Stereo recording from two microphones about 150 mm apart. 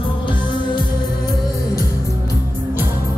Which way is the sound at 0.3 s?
30° left (ahead or behind).